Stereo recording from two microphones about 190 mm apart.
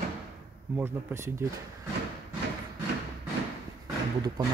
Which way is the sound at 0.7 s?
15° right (ahead or behind).